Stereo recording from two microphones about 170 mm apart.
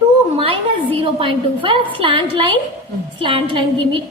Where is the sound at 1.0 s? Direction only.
30° right (ahead or behind).